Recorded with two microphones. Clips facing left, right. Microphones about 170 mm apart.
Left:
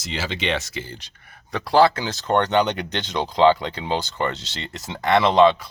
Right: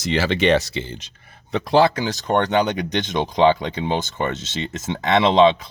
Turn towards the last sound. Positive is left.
turn(degrees=-20)  # may be behind; listen again after turning